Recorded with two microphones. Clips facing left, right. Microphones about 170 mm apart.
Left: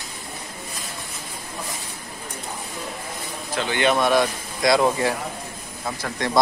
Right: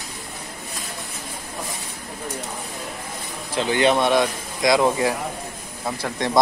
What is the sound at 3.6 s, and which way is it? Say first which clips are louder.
Speech: right 2 dB; 30° right (ahead or behind).